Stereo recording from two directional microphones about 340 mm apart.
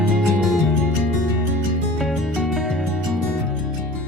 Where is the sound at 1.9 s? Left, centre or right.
Centre.